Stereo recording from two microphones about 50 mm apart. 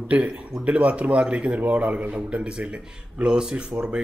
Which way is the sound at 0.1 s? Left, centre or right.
Right.